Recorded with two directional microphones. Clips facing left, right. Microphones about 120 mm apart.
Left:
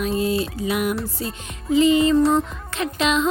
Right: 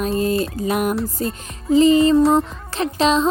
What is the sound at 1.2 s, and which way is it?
Music, 40° right (ahead or behind).